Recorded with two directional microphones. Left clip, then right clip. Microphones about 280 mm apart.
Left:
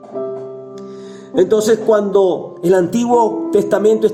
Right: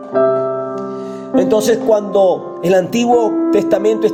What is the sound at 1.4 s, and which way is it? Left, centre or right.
Speech, right.